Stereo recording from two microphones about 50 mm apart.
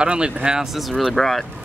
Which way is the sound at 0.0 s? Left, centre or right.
Centre.